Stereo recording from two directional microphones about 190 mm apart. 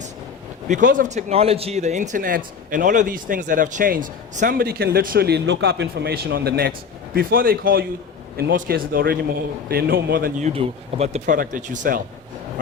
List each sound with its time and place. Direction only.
0.7 s a man's voice: 45° right (ahead or behind)
10.5 s speech: 30° right (ahead or behind)
11.3 s a man's voice: 45° right (ahead or behind)